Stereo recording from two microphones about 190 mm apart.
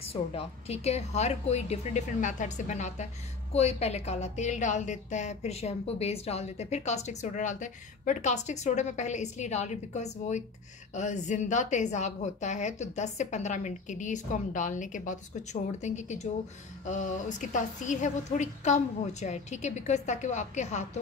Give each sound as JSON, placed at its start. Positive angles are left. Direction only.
{"t": 0.1, "sound": "a woman's voice", "side_deg": 30}